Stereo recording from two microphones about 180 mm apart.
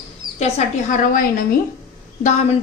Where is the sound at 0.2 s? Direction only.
25° right (ahead or behind).